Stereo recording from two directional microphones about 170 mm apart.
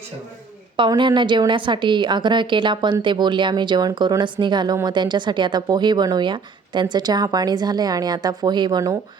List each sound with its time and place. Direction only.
0.8 s a woman's voice: 30° right (ahead or behind)